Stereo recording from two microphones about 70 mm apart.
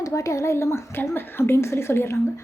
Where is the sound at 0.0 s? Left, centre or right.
Left.